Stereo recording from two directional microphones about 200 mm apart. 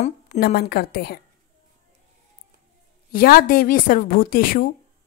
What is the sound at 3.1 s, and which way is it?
A woman's voice, 45° left (ahead or behind).